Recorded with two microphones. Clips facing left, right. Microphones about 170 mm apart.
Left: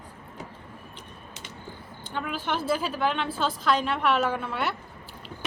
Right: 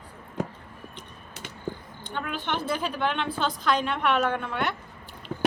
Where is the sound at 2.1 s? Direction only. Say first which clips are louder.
Left 1 dB; 5° left (ahead or behind).